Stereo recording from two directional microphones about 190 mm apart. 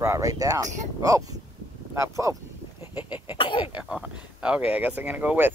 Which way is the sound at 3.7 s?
5° right (ahead or behind).